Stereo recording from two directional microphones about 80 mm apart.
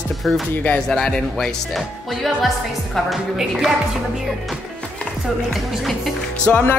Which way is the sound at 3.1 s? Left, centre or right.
Centre.